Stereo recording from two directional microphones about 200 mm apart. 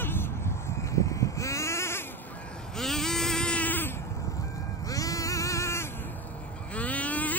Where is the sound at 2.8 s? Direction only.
Centre (ahead or behind).